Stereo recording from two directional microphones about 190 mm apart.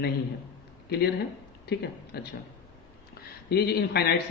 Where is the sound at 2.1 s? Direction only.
55° left (ahead or behind).